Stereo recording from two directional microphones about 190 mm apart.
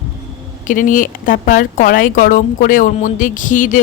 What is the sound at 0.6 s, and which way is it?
A woman's voice, 45° left (ahead or behind).